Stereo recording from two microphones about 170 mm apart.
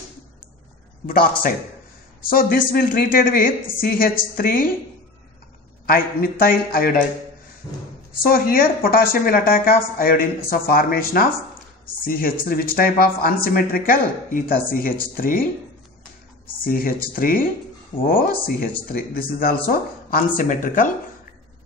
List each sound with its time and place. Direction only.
2.2 s speech: 60° left (ahead or behind)
5.9 s speech: 55° left (ahead or behind)
8.3 s speech: 60° left (ahead or behind)
16.6 s speech: 55° left (ahead or behind)